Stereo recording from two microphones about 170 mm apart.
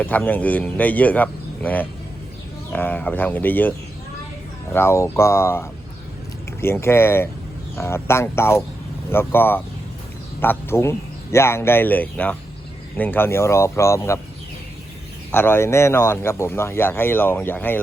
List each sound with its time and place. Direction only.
0.0 s speech: 10° left (ahead or behind)
15.3 s speech: 10° left (ahead or behind)